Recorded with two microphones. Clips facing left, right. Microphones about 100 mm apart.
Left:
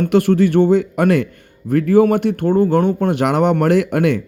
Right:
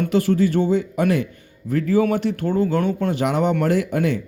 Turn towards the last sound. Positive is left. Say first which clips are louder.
# left 5 dB
turn(degrees=65)  # may be behind; listen again after turning